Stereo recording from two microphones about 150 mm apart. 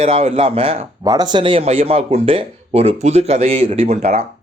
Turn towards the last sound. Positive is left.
turn(degrees=-45)  # may be behind; listen again after turning